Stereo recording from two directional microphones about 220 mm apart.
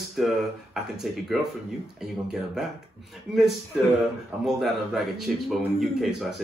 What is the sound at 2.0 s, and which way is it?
Speech, centre (ahead or behind).